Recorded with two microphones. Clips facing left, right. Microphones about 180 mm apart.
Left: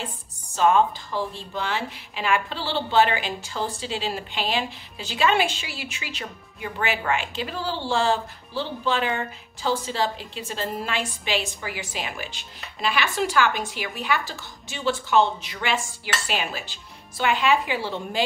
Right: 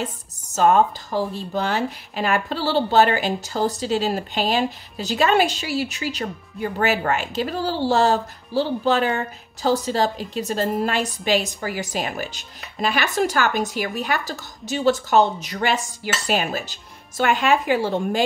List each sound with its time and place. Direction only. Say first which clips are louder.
0.0 s a woman's voice: right 6 dB; 40° right (ahead or behind)